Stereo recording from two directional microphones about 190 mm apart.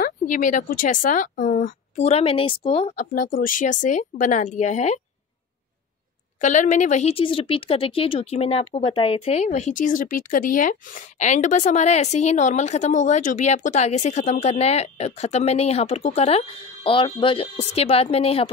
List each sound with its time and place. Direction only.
0.0 s speech: 45° left (ahead or behind)
3.3 s speech: 45° left (ahead or behind)
6.4 s speech: 40° left (ahead or behind)